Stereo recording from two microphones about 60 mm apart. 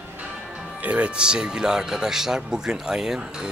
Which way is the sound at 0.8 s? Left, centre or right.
Right.